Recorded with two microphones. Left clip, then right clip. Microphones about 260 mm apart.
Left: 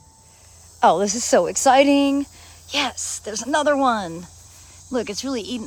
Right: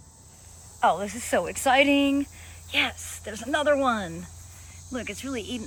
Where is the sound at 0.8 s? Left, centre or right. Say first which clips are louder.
Left 7 dB; centre.